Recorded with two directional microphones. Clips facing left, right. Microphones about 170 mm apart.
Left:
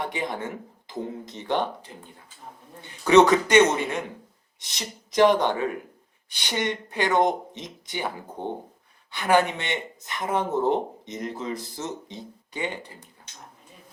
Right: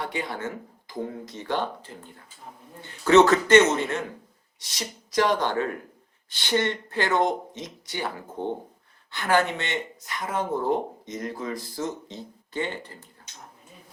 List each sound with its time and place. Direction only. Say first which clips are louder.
0.0 s speech: left 1 dB; 20° left (ahead or behind)